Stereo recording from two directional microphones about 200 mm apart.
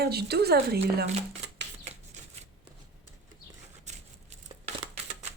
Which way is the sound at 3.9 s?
35° right (ahead or behind).